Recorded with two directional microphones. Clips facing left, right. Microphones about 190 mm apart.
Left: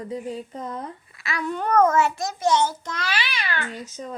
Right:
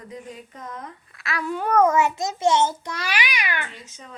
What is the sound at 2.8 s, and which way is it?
Speech, 15° right (ahead or behind).